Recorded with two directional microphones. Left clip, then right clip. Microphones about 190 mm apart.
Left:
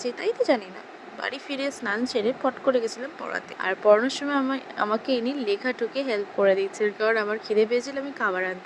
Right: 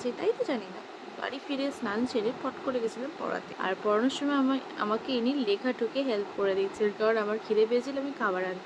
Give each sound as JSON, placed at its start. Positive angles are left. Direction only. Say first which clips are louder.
{"t": 0.0, "sound": "speech", "louder": "left 4 dB", "side_deg": 35}